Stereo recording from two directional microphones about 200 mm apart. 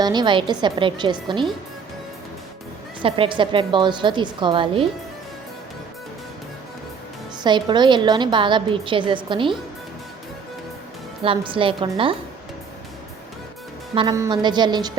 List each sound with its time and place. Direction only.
0.0 s a woman's voice: 20° right (ahead or behind)
3.0 s a woman's voice: 25° right (ahead or behind)
7.4 s a woman's voice: 20° right (ahead or behind)
11.2 s a woman's voice: 25° right (ahead or behind)
13.9 s a woman's voice: 25° right (ahead or behind)